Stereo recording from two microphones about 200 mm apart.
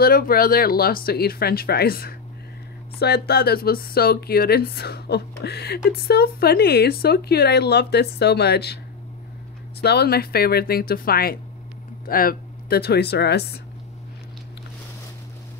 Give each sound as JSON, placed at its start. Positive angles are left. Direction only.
{"t": 0.0, "sound": "speech", "side_deg": 45}
{"t": 9.8, "sound": "speech", "side_deg": 55}